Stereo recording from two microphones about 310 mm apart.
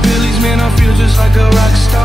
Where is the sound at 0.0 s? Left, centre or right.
Centre.